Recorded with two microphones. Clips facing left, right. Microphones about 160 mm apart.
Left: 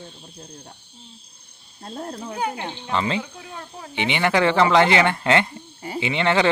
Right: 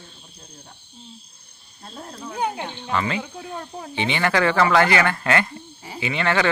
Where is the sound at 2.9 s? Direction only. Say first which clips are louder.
Left 1 dB; 25° left (ahead or behind).